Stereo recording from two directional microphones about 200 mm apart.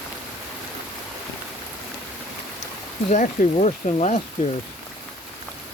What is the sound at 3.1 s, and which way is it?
Speech, 35° left (ahead or behind).